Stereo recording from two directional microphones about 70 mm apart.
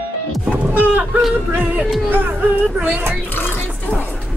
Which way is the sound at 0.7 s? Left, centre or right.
Right.